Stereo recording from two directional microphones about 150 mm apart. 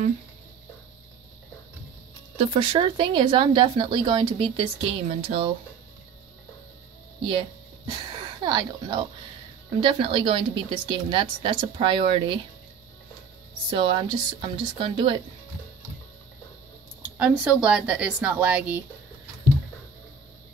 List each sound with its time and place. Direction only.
2.3 s a woman's voice: 40° right (ahead or behind)
7.2 s a sound: 35° right (ahead or behind)
8.4 s a woman's voice: 30° right (ahead or behind)
13.7 s a woman's voice: 35° right (ahead or behind)
17.0 s speech: 10° right (ahead or behind)